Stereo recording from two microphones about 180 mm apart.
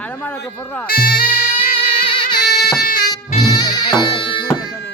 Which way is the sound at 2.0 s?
55° left (ahead or behind).